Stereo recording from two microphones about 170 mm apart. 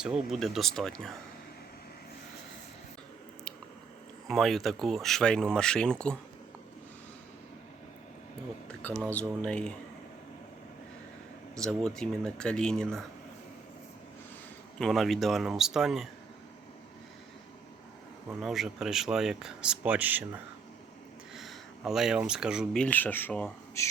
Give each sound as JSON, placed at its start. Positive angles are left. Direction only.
{"t": 0.0, "sound": "speech", "side_deg": -5}
{"t": 4.3, "sound": "speech", "side_deg": 0}
{"t": 9.0, "sound": "speech", "side_deg": 10}
{"t": 11.5, "sound": "speech", "side_deg": 5}
{"t": 14.8, "sound": "speech", "side_deg": 0}
{"t": 18.3, "sound": "speech", "side_deg": 0}